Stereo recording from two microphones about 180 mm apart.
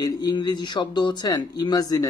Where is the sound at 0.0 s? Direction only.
20° left (ahead or behind).